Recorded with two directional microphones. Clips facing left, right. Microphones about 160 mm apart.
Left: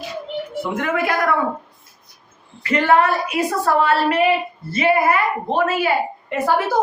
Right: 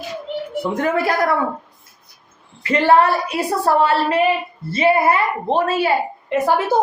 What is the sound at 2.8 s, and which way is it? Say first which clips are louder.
A woman's voice: right 2 dB; 30° right (ahead or behind).